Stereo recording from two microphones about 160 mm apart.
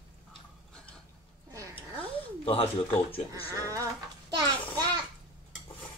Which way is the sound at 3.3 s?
20° right (ahead or behind).